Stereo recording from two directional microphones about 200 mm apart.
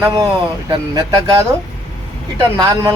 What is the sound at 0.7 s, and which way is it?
Speech, 20° right (ahead or behind).